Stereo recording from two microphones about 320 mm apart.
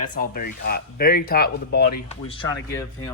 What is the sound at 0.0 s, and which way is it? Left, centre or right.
Speech, left.